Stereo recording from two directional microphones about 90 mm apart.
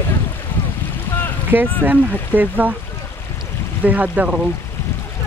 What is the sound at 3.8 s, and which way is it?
Speech, 15° right (ahead or behind).